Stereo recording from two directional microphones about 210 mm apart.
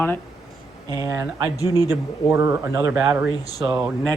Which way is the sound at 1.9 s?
15° right (ahead or behind).